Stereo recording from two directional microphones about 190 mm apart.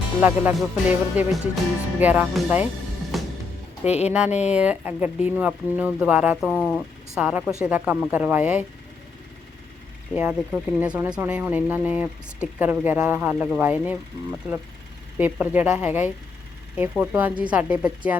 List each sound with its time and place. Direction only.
0.2 s speech: 10° right (ahead or behind)
3.1 s music: centre (ahead or behind)
3.8 s speech: 35° left (ahead or behind)
4.4 s speech: 5° right (ahead or behind)
10.2 s speech: 5° right (ahead or behind)